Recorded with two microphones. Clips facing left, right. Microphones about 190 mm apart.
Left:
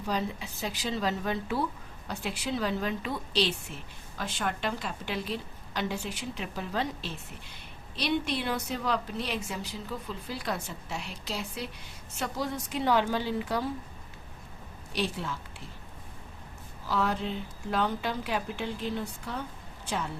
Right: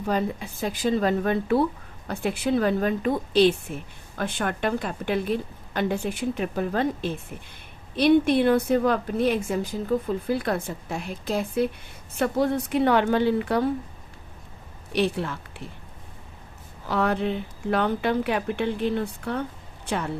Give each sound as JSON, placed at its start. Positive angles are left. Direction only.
{"t": 0.0, "sound": "a woman's voice", "side_deg": -55}
{"t": 14.9, "sound": "a woman's voice", "side_deg": -60}
{"t": 16.9, "sound": "a woman's voice", "side_deg": -60}